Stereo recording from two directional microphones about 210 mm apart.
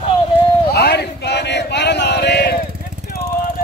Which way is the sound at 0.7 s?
50° left (ahead or behind).